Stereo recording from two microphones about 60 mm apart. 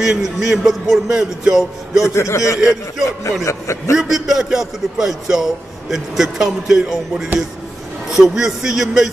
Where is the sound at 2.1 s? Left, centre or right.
Left.